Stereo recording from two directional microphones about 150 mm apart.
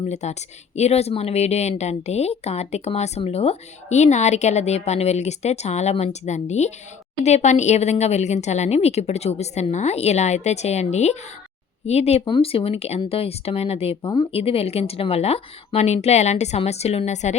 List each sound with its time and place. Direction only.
0.0 s speech: 50° left (ahead or behind)